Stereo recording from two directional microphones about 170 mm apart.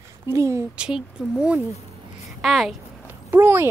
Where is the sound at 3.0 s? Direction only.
15° right (ahead or behind).